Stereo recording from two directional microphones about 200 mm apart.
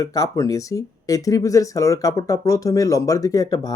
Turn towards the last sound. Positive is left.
turn(degrees=20)  # may be behind; listen again after turning